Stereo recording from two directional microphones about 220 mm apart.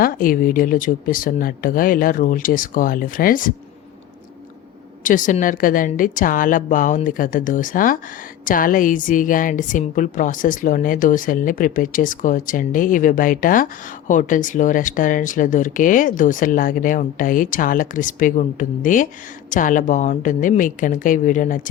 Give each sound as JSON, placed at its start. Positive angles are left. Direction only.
{"t": 0.0, "sound": "a woman's voice", "side_deg": 40}
{"t": 5.0, "sound": "a woman's voice", "side_deg": 35}